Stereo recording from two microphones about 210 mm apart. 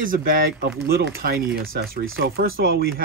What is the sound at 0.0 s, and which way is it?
Speech, 40° right (ahead or behind).